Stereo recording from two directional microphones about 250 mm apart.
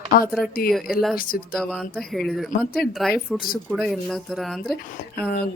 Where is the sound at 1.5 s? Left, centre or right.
Centre.